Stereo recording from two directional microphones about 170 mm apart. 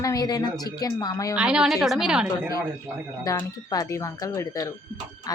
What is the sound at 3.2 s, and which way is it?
Speech, 20° left (ahead or behind).